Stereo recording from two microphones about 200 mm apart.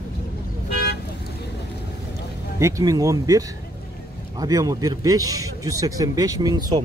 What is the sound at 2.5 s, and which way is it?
A man's voice, 15° right (ahead or behind).